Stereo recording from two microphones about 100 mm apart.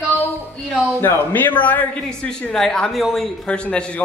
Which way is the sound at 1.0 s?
20° left (ahead or behind).